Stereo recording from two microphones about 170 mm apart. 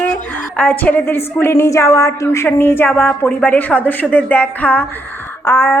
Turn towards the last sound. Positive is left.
turn(degrees=15)  # may be behind; listen again after turning